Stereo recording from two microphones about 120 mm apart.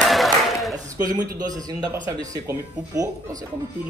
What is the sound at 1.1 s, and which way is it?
Speech, 35° right (ahead or behind).